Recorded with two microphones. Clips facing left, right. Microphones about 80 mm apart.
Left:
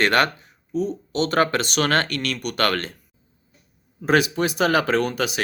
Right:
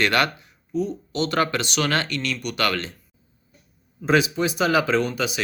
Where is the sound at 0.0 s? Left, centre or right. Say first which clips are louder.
Left 2 dB; left.